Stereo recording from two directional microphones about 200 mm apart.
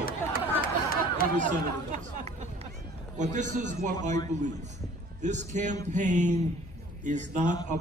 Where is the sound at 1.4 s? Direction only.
40° right (ahead or behind).